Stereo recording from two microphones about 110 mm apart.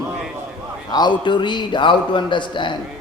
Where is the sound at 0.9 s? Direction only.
40° left (ahead or behind).